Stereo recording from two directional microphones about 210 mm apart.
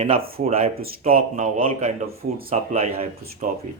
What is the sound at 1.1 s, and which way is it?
Speech, 30° right (ahead or behind).